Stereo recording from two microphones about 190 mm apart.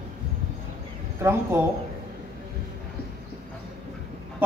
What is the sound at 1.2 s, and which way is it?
Speech, 15° right (ahead or behind).